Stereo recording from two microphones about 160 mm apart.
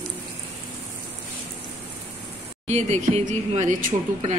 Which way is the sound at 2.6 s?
45° right (ahead or behind).